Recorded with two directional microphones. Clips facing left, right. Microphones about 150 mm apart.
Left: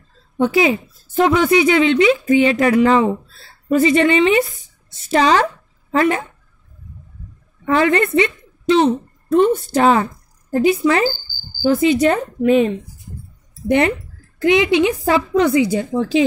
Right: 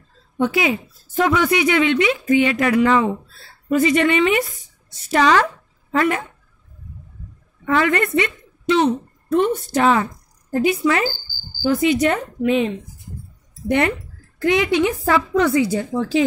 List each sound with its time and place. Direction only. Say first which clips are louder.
0.4 s a woman's voice: left 4 dB; 30° left (ahead or behind)
7.6 s a woman's voice: left 3 dB; 30° left (ahead or behind); by 12.7 s 45° left (ahead or behind)
13.7 s speech: left 3 dB; 25° left (ahead or behind)